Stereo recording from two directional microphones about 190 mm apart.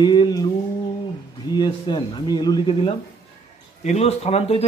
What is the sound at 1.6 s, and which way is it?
Speech, 25° left (ahead or behind).